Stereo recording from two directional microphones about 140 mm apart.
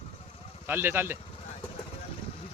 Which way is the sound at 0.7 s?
15° right (ahead or behind).